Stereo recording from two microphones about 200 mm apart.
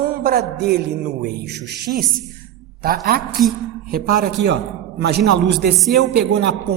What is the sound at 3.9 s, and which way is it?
Speech, 50° right (ahead or behind).